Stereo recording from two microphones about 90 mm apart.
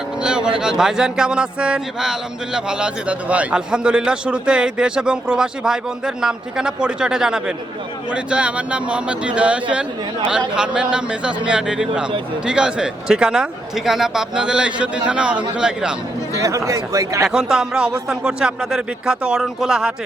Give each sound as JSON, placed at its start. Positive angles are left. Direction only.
{"t": 0.2, "sound": "speech", "side_deg": -10}
{"t": 16.3, "sound": "speech", "side_deg": -35}
{"t": 17.2, "sound": "speech", "side_deg": -5}